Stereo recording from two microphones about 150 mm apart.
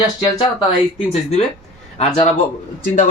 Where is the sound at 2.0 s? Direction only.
45° left (ahead or behind).